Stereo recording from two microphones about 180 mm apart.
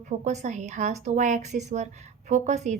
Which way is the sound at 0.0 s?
40° right (ahead or behind).